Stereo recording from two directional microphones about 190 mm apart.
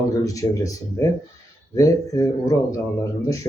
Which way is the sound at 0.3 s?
15° left (ahead or behind).